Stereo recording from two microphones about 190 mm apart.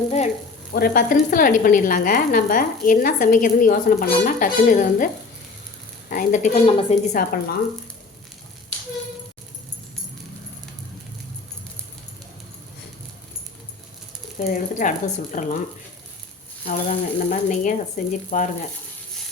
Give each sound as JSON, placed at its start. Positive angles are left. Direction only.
{"t": 0.7, "sound": "a woman's voice", "side_deg": 50}
{"t": 6.1, "sound": "speech", "side_deg": 40}
{"t": 7.1, "sound": "a woman's voice", "side_deg": 50}
{"t": 14.3, "sound": "speech", "side_deg": 40}
{"t": 16.6, "sound": "a woman's voice", "side_deg": 40}